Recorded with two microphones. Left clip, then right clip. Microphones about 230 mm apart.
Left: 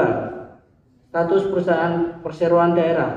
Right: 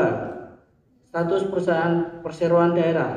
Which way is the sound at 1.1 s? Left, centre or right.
Right.